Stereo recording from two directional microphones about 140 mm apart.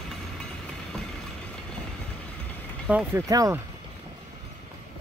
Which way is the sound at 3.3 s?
25° right (ahead or behind).